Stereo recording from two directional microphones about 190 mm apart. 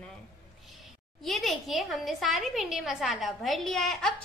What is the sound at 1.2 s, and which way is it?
A woman's voice, centre (ahead or behind).